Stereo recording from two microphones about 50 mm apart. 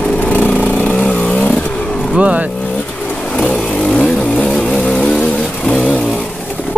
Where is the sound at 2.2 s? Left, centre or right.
Right.